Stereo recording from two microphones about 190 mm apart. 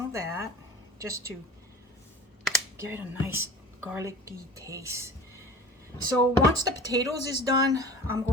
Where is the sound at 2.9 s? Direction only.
10° right (ahead or behind).